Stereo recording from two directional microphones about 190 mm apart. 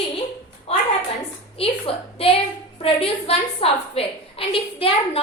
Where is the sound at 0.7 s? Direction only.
30° left (ahead or behind).